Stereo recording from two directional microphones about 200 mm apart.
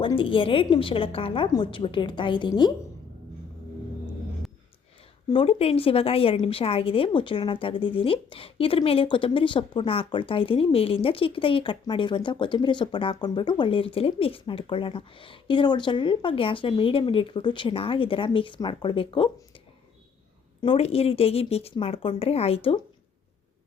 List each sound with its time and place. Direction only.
0.0 s a woman's voice: 25° left (ahead or behind)
5.3 s a woman's voice: 30° left (ahead or behind)
20.6 s a woman's voice: 30° left (ahead or behind)